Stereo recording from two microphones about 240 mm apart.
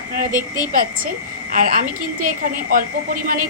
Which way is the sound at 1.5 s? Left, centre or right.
Right.